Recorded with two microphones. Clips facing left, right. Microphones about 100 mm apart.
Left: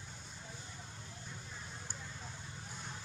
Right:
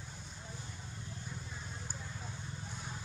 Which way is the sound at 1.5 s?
Centre (ahead or behind).